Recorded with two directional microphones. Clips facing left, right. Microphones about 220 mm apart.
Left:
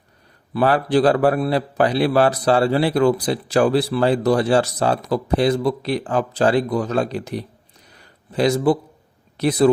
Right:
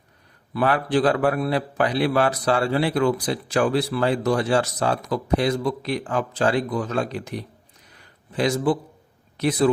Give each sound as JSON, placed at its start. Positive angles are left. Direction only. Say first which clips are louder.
{"t": 0.5, "sound": "a man's voice", "louder": "left 4 dB", "side_deg": 35}
{"t": 7.9, "sound": "a sound", "louder": "left 4 dB", "side_deg": 35}
{"t": 9.4, "sound": "a man's voice", "louder": "left 4 dB", "side_deg": 35}